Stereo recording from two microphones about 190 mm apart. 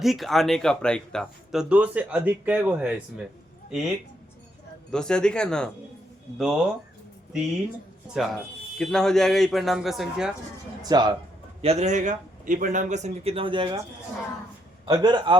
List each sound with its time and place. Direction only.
0.0 s speech: centre (ahead or behind)
8.1 s speech: centre (ahead or behind)
10.8 s speech: 20° right (ahead or behind)
11.6 s a man's voice: 35° right (ahead or behind)
14.8 s speech: 25° right (ahead or behind)